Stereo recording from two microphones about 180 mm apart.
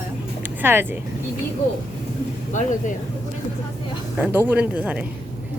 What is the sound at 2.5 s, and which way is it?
Speech, 45° left (ahead or behind).